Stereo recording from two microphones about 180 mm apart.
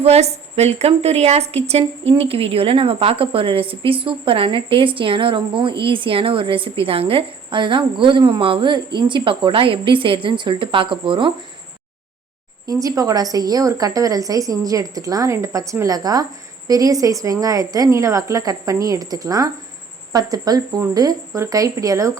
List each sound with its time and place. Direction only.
0.0 s a woman's voice: 35° right (ahead or behind)
12.6 s a woman's voice: 20° right (ahead or behind)